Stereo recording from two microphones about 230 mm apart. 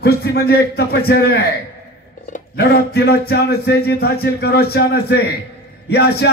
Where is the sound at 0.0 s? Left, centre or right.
Left.